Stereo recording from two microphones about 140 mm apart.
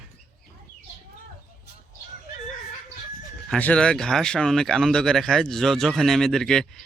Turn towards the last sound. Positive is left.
turn(degrees=5)  # may be behind; listen again after turning